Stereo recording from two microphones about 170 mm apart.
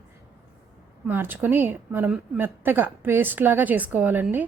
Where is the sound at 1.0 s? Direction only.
10° right (ahead or behind).